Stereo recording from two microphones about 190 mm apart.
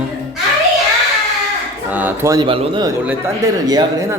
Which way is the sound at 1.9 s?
10° right (ahead or behind).